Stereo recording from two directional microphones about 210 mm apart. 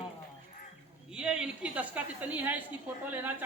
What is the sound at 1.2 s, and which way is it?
A woman's voice, 5° right (ahead or behind).